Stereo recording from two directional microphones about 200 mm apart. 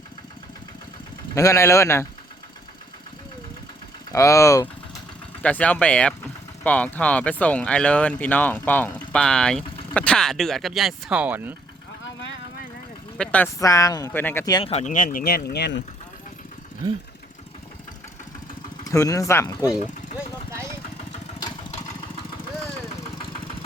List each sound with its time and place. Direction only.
1.4 s speech: 15° left (ahead or behind)
4.1 s speech: 15° left (ahead or behind); by 11.5 s 10° right (ahead or behind)
13.1 s speech: 5° left (ahead or behind)
14.6 s speech: 30° left (ahead or behind); by 15.8 s 55° left (ahead or behind)
18.9 s speech: 15° left (ahead or behind)
19.6 s a sound: 5° right (ahead or behind)
21.3 s engine: 20° left (ahead or behind)